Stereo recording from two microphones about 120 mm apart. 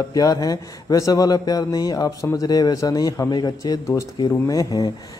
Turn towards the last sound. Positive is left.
turn(degrees=30)  # may be behind; listen again after turning